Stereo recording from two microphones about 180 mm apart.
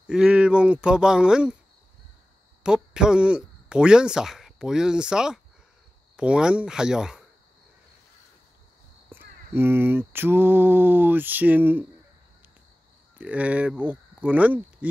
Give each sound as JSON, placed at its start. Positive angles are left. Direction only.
{"t": 0.0, "sound": "speech", "side_deg": -5}
{"t": 2.6, "sound": "speech", "side_deg": -5}
{"t": 9.1, "sound": "a sound", "side_deg": -10}
{"t": 13.2, "sound": "speech", "side_deg": -5}